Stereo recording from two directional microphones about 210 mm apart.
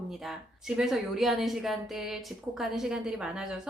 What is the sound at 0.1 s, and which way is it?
Speech, centre (ahead or behind).